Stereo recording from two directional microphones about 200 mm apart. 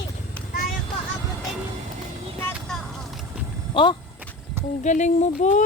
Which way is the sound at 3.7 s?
25° left (ahead or behind).